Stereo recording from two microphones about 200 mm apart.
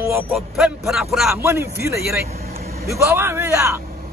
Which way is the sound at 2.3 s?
50° right (ahead or behind).